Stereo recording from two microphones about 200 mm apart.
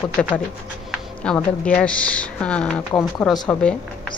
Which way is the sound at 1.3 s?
5° left (ahead or behind).